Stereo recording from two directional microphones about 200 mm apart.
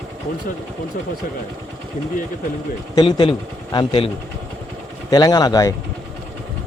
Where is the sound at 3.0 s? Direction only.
25° left (ahead or behind).